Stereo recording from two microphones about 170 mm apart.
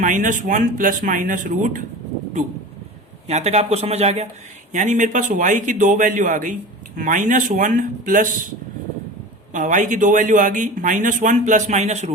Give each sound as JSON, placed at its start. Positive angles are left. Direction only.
{"t": 0.0, "sound": "a man's voice", "side_deg": -50}
{"t": 3.2, "sound": "a man's voice", "side_deg": -40}
{"t": 9.5, "sound": "a man's voice", "side_deg": -50}